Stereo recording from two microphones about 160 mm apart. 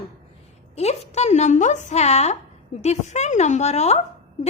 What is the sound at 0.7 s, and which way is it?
A woman's voice, 40° left (ahead or behind).